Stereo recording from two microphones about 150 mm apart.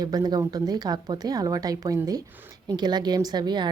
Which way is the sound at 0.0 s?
25° right (ahead or behind).